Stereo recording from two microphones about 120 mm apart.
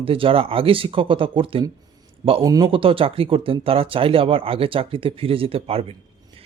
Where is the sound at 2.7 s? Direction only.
50° right (ahead or behind).